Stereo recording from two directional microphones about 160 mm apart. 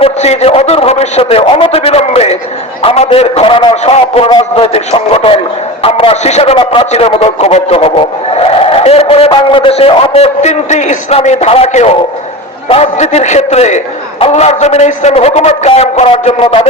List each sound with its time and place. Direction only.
0.0 s a man's voice: 40° left (ahead or behind)
4.3 s a sound: 30° left (ahead or behind)
5.8 s a man's voice: 35° left (ahead or behind)